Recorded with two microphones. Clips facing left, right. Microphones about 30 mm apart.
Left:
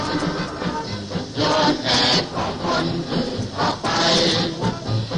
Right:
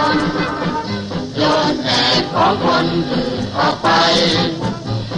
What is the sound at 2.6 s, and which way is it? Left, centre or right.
Music, right.